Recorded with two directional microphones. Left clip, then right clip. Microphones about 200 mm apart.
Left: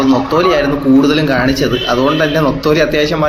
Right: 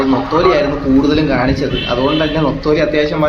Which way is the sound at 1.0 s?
15° left (ahead or behind).